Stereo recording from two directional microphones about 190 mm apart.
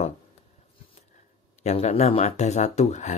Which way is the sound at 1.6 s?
35° left (ahead or behind).